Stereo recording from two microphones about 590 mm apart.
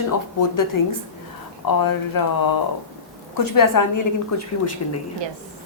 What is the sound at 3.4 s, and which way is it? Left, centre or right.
A woman's voice, left.